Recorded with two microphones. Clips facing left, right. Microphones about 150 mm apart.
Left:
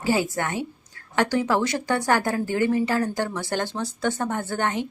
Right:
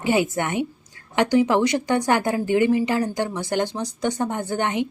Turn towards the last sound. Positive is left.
turn(degrees=-15)  # may be behind; listen again after turning